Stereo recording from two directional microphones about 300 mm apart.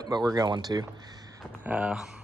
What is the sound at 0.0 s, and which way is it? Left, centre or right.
Speech, centre.